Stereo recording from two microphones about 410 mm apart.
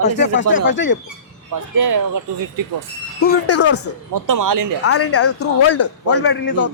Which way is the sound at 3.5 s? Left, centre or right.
Left.